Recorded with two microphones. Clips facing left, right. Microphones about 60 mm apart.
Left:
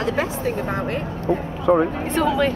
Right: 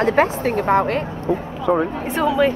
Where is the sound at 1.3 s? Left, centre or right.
Centre.